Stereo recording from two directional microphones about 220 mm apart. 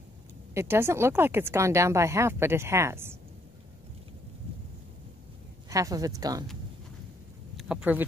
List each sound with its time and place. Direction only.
0.6 s speech: 10° right (ahead or behind)
5.7 s speech: 15° right (ahead or behind)
7.5 s speech: 5° right (ahead or behind)